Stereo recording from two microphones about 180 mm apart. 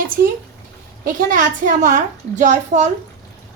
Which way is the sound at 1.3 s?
45° right (ahead or behind).